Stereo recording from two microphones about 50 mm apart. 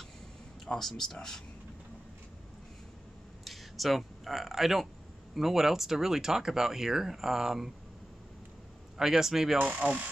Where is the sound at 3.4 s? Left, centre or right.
Centre.